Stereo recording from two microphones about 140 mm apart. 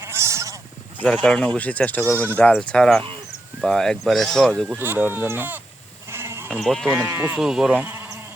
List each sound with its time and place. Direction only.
0.0 s goat: 20° right (ahead or behind)
1.2 s speech: 5° left (ahead or behind)
2.1 s speech: 15° right (ahead or behind)
2.5 s speech: 5° left (ahead or behind)
4.8 s speech: 15° right (ahead or behind)
6.1 s sheep: 20° right (ahead or behind)
6.5 s speech: 5° left (ahead or behind)
6.8 s speech: 15° right (ahead or behind)
7.3 s speech: 5° right (ahead or behind)